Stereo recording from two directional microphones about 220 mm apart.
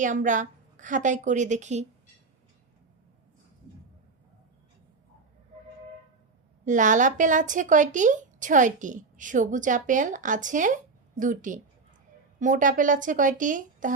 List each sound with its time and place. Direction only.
0.0 s a woman's voice: 35° right (ahead or behind)
6.7 s a woman's voice: 35° right (ahead or behind)